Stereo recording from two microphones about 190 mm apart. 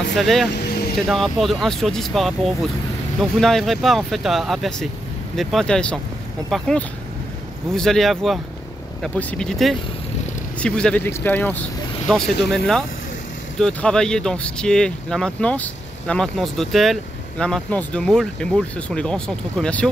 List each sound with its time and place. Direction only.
0.1 s speech: centre (ahead or behind)
0.5 s vehicle: 55° left (ahead or behind)
0.9 s speech: centre (ahead or behind)
7.7 s speech: centre (ahead or behind)